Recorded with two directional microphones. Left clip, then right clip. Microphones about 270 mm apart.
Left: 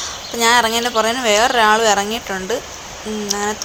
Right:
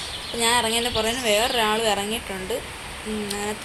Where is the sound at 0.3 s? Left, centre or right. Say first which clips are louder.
Left 7 dB; centre.